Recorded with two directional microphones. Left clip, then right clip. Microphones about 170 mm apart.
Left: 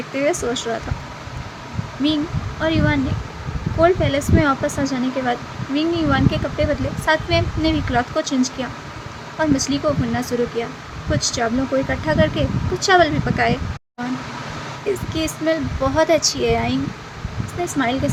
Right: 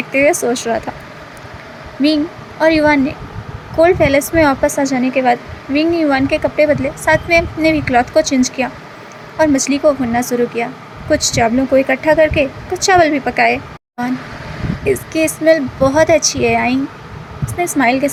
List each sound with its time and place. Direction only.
0.1 s speech: 25° right (ahead or behind)
2.6 s speech: 35° right (ahead or behind)
14.8 s speech: 25° right (ahead or behind)